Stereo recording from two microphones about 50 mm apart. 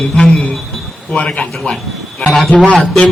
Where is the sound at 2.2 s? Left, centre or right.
Centre.